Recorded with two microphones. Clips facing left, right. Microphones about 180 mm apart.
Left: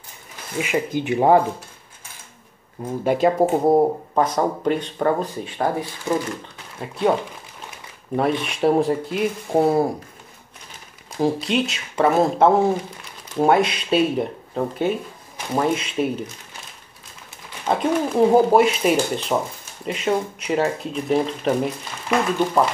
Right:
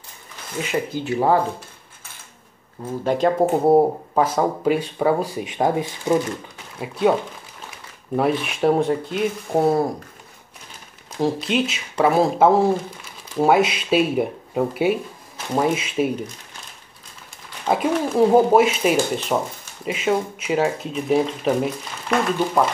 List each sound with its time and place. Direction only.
0.6 s speech: 10° left (ahead or behind)
2.8 s speech: 10° left (ahead or behind); by 6.1 s 15° right (ahead or behind)
6.8 s speech: centre (ahead or behind)
8.2 s speech: centre (ahead or behind)
11.1 s speech: centre (ahead or behind)
17.6 s speech: 5° right (ahead or behind)